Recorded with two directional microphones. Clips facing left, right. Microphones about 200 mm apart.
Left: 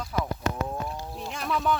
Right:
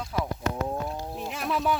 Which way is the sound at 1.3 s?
Centre (ahead or behind).